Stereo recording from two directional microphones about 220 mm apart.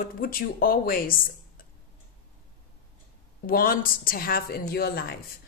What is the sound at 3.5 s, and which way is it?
A woman's voice, 40° left (ahead or behind).